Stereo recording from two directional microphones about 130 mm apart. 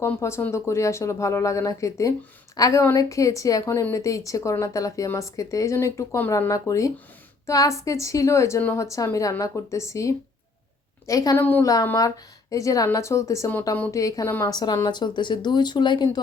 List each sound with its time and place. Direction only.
0.2 s a woman's voice: 20° left (ahead or behind)
11.3 s a woman's voice: 15° left (ahead or behind)
11.6 s speech: 30° left (ahead or behind)